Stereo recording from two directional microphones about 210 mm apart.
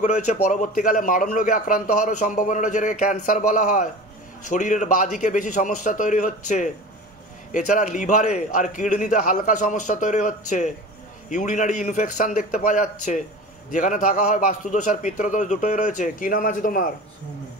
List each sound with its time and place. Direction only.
0.3 s a man's voice: 40° left (ahead or behind)